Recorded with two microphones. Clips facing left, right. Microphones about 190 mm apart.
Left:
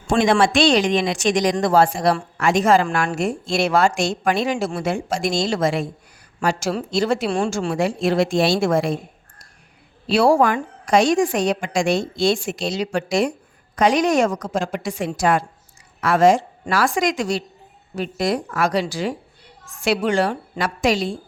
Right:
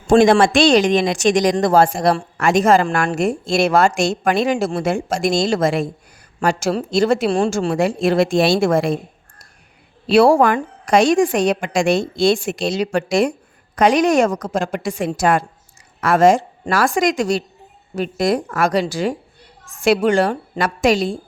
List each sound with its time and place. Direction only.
0.1 s a woman's voice: 45° right (ahead or behind)
7.3 s speech: 35° right (ahead or behind)
7.5 s a woman's voice: 50° right (ahead or behind)
10.1 s a woman's voice: 60° right (ahead or behind)